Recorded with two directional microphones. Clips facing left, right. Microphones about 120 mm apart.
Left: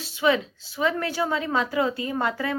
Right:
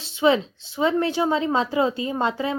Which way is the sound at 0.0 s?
25° right (ahead or behind).